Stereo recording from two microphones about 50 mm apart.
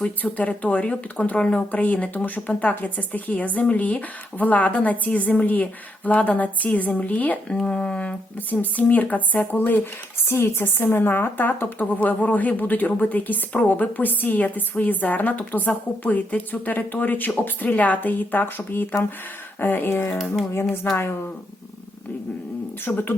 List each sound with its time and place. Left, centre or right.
0.2 s a woman's voice: left
7.5 s a woman's voice: left
10.2 s a woman's voice: left
19.5 s a sound: left
22.9 s a woman's voice: left